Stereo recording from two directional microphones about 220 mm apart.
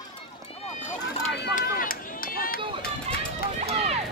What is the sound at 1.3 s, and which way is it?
Run, 45° left (ahead or behind).